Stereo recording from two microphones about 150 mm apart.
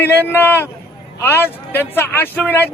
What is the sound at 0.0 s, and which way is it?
Speech, 15° left (ahead or behind).